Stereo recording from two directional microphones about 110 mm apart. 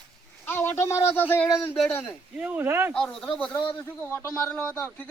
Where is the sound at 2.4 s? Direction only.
15° right (ahead or behind).